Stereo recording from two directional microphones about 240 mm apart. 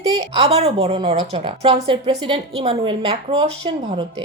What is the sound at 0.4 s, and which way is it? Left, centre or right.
A woman's voice, right.